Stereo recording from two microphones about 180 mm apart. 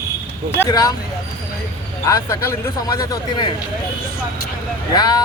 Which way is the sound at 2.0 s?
15° left (ahead or behind).